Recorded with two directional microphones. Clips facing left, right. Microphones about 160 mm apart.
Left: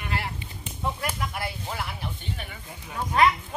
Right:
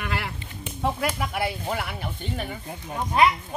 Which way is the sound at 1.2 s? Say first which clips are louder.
Right 5 dB; 65° right (ahead or behind).